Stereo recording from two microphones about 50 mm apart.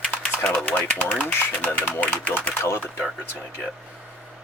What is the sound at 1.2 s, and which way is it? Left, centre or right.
Speech, left.